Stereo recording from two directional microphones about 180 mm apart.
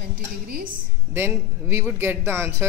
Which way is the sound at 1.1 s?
10° right (ahead or behind).